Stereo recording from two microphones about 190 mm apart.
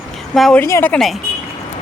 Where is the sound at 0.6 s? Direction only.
15° left (ahead or behind).